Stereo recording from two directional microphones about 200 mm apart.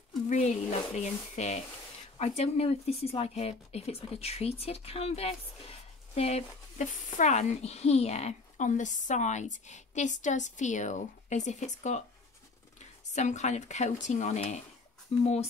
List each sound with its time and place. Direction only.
0.3 s speech: 35° left (ahead or behind)